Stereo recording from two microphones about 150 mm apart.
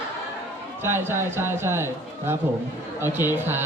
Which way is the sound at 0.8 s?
15° right (ahead or behind).